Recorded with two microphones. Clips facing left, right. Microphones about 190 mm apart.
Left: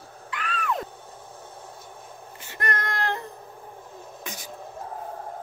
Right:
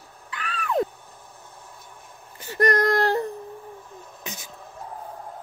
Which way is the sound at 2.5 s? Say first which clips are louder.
Right 10 dB; 40° right (ahead or behind).